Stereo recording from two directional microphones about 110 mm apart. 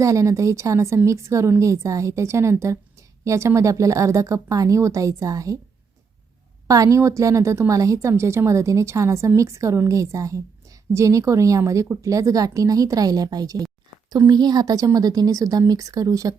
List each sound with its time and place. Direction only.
0.0 s a woman's voice: 30° right (ahead or behind)
6.7 s a woman's voice: 30° right (ahead or behind)